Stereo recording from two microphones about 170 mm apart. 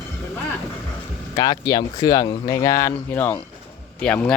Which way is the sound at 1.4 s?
20° left (ahead or behind).